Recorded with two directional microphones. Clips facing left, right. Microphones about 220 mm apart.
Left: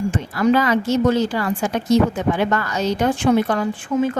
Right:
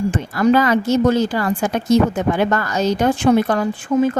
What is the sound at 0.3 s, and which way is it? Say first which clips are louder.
A woman's voice: right 2 dB; 45° right (ahead or behind).